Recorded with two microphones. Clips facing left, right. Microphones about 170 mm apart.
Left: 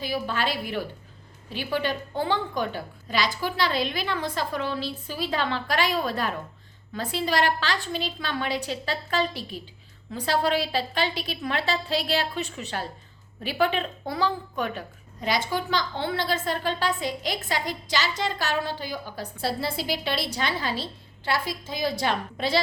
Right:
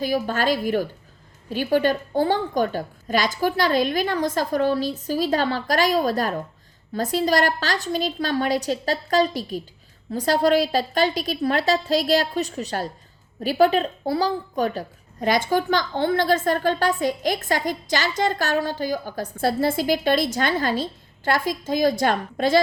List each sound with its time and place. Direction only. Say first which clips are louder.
0.0 s a woman's voice: right 6 dB; 45° right (ahead or behind)